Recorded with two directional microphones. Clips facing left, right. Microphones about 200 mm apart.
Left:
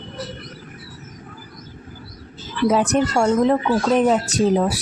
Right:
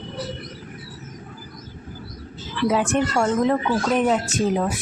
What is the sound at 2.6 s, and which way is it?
Speech, 40° left (ahead or behind).